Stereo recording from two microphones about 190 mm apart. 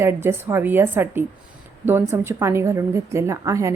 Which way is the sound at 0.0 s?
10° right (ahead or behind).